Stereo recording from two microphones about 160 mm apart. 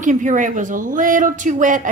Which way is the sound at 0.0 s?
50° right (ahead or behind).